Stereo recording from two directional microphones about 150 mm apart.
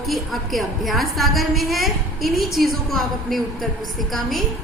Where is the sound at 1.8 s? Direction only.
80° right.